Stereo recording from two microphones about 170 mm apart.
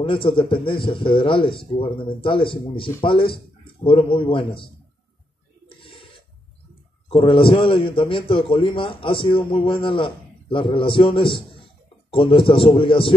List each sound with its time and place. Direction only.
0.0 s a man's voice: 30° left (ahead or behind)
5.8 s a sound: 30° left (ahead or behind)
7.1 s a man's voice: 30° left (ahead or behind)